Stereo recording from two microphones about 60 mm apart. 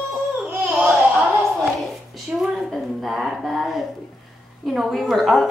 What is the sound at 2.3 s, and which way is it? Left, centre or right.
Speech, centre.